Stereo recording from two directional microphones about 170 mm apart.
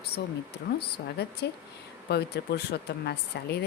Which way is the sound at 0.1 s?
70° left (ahead or behind).